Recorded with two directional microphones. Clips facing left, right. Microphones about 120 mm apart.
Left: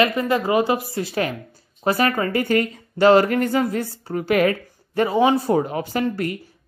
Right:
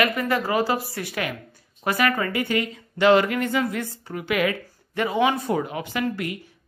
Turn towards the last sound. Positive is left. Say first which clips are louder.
# left 4 dB
turn(degrees=40)  # may be behind; listen again after turning